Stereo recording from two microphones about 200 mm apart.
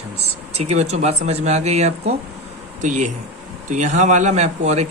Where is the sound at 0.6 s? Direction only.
35° right (ahead or behind).